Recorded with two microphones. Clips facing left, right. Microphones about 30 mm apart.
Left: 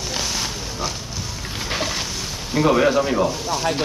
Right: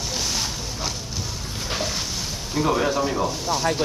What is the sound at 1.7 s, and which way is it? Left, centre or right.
Boat, left.